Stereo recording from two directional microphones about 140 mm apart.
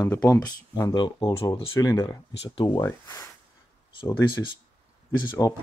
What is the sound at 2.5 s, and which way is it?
Speech, 35° left (ahead or behind).